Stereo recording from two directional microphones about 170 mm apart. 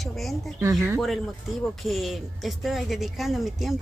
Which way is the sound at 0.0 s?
Centre (ahead or behind).